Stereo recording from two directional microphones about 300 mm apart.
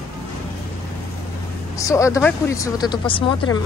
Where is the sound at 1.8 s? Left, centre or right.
Centre.